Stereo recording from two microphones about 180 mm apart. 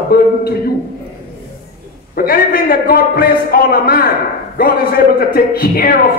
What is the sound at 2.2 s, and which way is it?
A man's voice, 55° left (ahead or behind).